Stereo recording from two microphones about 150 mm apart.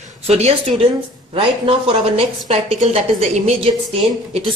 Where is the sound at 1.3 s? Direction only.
35° right (ahead or behind).